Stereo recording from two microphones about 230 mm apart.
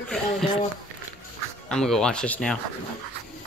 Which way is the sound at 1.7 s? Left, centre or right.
Centre.